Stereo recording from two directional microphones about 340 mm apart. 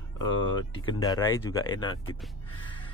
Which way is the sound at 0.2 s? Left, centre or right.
Centre.